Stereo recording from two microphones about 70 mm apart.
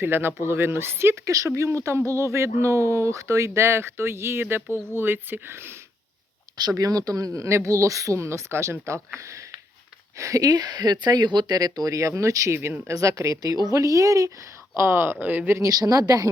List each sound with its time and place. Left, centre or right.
0.0 s speech: right
1.3 s speech: right
6.6 s speech: right
7.3 s speech: right
10.2 s speech: right
14.8 s speech: right
15.5 s speech: right